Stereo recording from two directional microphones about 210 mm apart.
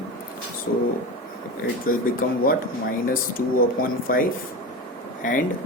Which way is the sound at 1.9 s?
40° left (ahead or behind).